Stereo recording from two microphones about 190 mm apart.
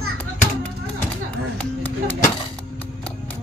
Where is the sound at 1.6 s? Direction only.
10° left (ahead or behind).